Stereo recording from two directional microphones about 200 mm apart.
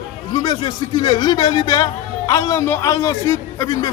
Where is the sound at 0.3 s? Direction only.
20° left (ahead or behind).